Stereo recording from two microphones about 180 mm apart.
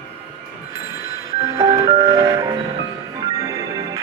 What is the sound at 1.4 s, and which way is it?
Music, 20° right (ahead or behind).